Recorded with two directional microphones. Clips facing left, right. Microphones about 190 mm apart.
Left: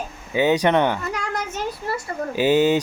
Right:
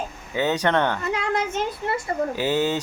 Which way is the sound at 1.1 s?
25° right (ahead or behind).